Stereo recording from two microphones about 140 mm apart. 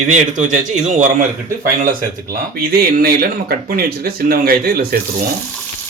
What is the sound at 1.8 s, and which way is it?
Speech, 85° right.